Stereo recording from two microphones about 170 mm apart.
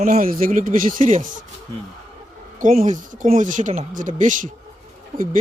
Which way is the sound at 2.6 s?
50° right (ahead or behind).